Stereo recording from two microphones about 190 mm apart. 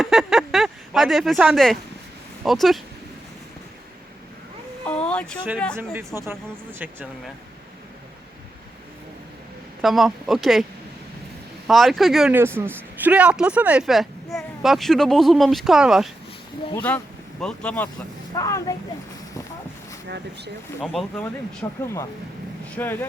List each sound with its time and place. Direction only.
0.0 s a sound: centre (ahead or behind)
2.4 s speech: centre (ahead or behind)
4.9 s speech: 5° left (ahead or behind)
5.7 s speech: 15° right (ahead or behind)
9.8 s speech: centre (ahead or behind)
11.7 s speech: centre (ahead or behind)
12.4 s speech: 10° right (ahead or behind)
16.7 s speech: 10° left (ahead or behind)
18.3 s speech: 15° left (ahead or behind)
20.1 s speech: 60° right (ahead or behind)
20.8 s speech: centre (ahead or behind)
21.6 s speech: 10° left (ahead or behind)